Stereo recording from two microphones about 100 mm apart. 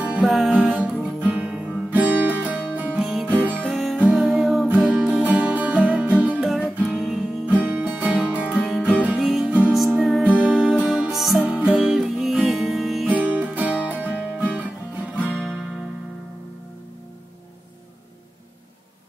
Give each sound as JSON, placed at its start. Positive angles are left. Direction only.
{"t": 0.0, "sound": "music", "side_deg": -15}
{"t": 3.0, "sound": "music", "side_deg": 0}
{"t": 3.3, "sound": "music", "side_deg": -15}
{"t": 3.6, "sound": "music", "side_deg": 0}
{"t": 6.4, "sound": "music", "side_deg": 0}
{"t": 7.7, "sound": "music", "side_deg": -15}
{"t": 13.1, "sound": "music", "side_deg": -15}